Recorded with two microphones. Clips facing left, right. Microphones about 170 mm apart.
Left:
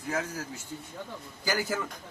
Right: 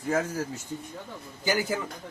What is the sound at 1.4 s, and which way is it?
Speech, 20° right (ahead or behind).